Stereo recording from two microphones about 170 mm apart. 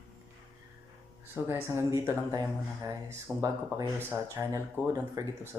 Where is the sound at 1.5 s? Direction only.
15° right (ahead or behind).